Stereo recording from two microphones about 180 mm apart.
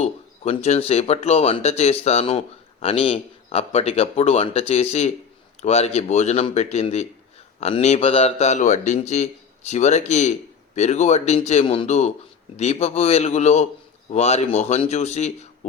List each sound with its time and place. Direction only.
0.0 s a man's voice: 35° left (ahead or behind)